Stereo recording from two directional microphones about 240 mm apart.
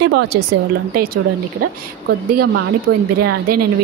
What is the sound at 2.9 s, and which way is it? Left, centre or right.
Speech, right.